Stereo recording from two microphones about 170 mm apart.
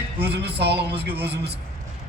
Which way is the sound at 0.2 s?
75° right (ahead or behind).